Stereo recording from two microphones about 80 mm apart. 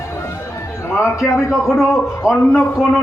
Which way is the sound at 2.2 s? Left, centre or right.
Centre.